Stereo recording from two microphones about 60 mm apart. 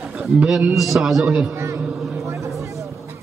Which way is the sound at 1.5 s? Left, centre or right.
Right.